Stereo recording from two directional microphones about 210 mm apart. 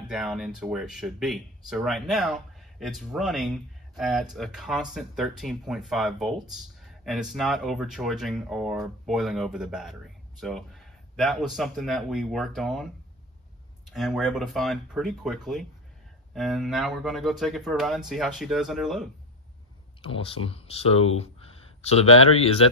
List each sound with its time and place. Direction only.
0.1 s speech: centre (ahead or behind)
20.0 s speech: 25° left (ahead or behind)